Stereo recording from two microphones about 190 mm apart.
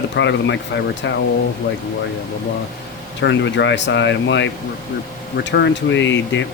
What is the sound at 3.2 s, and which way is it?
Speech, 70° left (ahead or behind).